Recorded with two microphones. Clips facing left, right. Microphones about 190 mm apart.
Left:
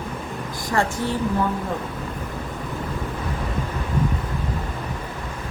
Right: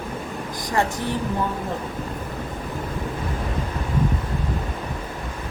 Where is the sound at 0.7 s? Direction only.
15° right (ahead or behind).